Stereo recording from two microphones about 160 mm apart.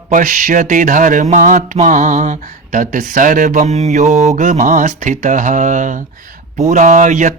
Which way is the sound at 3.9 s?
50° right (ahead or behind).